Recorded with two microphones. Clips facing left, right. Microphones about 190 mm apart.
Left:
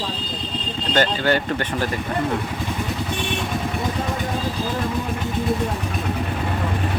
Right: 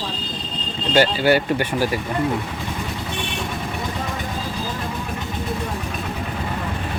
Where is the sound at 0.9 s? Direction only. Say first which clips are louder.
Right 3 dB; 10° right (ahead or behind).